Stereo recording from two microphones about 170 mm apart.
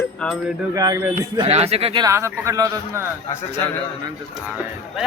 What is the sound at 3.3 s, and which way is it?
Speech, 15° left (ahead or behind).